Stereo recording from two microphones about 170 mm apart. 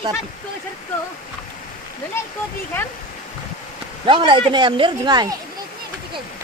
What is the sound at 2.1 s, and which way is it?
Speech, 15° left (ahead or behind).